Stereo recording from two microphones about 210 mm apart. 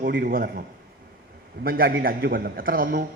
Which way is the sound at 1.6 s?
45° right (ahead or behind).